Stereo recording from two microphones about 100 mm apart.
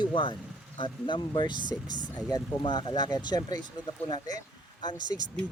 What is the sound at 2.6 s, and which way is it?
Speech, 50° left (ahead or behind).